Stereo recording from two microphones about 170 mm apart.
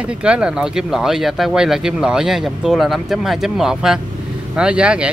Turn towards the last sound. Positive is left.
turn(degrees=-5)  # may be behind; listen again after turning